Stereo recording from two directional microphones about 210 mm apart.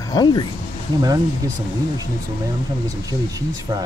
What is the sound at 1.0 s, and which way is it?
Speech, 20° right (ahead or behind).